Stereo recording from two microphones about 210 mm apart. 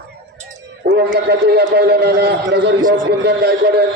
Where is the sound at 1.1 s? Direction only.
50° right (ahead or behind).